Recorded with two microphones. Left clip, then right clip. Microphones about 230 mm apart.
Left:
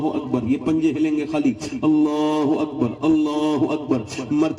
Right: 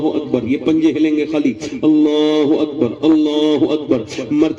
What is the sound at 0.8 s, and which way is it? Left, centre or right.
Speech, centre.